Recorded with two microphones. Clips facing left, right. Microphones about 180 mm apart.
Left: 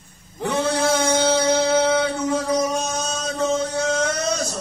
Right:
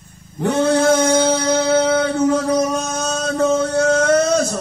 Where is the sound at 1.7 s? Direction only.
50° right (ahead or behind).